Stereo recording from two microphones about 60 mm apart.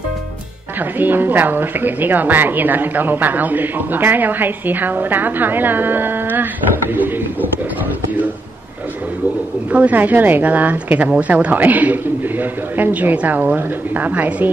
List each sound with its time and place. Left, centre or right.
0.7 s a woman's voice: right
9.7 s a man's voice: right